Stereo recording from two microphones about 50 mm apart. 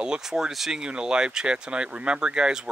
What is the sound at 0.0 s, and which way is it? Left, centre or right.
Speech, centre.